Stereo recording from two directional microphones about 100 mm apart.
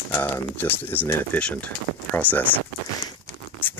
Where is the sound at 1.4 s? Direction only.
10° left (ahead or behind).